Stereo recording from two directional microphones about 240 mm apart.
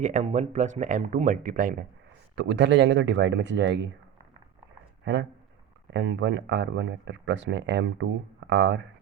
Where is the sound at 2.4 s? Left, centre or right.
Right.